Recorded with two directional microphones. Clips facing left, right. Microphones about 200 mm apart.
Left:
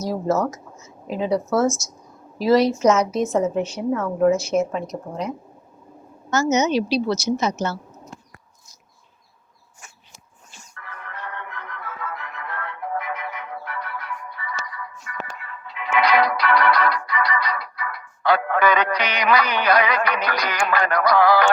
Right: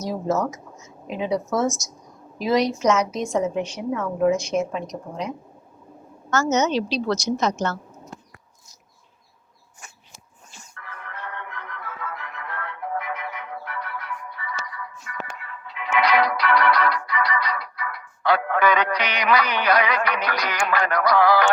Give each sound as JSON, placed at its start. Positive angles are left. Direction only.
{"t": 0.0, "sound": "a woman's voice", "side_deg": 0}
{"t": 6.3, "sound": "a woman's voice", "side_deg": 10}
{"t": 12.2, "sound": "music", "side_deg": 40}
{"t": 15.7, "sound": "music", "side_deg": 40}